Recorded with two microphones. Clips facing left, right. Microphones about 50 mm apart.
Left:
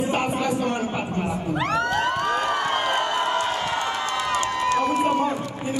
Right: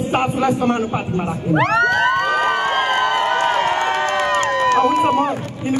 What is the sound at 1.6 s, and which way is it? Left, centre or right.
Crowd, right.